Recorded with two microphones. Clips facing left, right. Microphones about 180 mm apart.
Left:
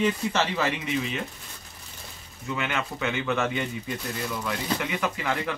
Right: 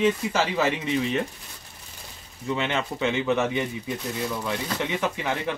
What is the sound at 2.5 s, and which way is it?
Speech, 25° right (ahead or behind).